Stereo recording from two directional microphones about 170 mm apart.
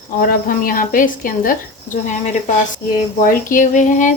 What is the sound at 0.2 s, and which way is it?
A woman's voice, 55° left (ahead or behind).